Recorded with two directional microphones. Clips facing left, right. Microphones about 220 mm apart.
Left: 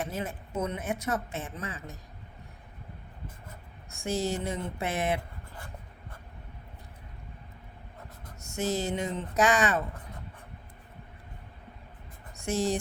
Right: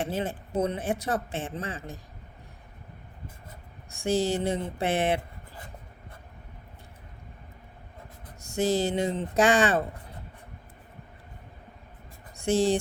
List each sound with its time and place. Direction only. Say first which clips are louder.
0.0 s speech: right 4 dB; 30° right (ahead or behind)
3.8 s speech: right 5 dB; 30° right (ahead or behind)
8.4 s speech: right 5 dB; 30° right (ahead or behind)
12.4 s speech: right 5 dB; 30° right (ahead or behind)